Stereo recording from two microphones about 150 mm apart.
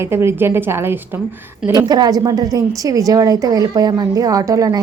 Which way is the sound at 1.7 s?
25° right (ahead or behind).